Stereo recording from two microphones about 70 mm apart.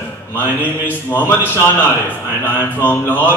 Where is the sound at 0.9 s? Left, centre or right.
Left.